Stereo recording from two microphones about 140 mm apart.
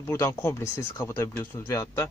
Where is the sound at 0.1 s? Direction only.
20° left (ahead or behind).